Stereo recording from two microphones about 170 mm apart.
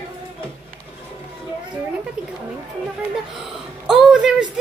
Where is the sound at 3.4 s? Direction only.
5° right (ahead or behind).